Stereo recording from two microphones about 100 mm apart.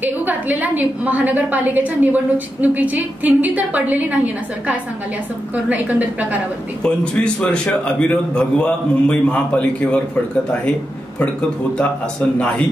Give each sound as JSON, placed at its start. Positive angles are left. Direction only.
{"t": 0.0, "sound": "a woman's voice", "side_deg": -15}
{"t": 5.7, "sound": "a woman's voice", "side_deg": -15}
{"t": 6.8, "sound": "a man's voice", "side_deg": 10}